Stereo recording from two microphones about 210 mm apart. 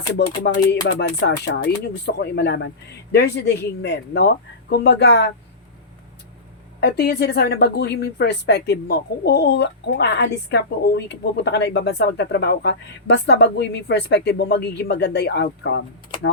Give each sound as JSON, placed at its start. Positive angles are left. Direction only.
{"t": 0.2, "sound": "speech", "side_deg": 55}
{"t": 6.7, "sound": "speech", "side_deg": 50}